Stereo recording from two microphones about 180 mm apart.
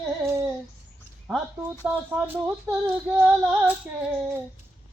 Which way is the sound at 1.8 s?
10° right (ahead or behind).